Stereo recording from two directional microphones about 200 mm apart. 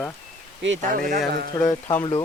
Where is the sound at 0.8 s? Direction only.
45° right (ahead or behind).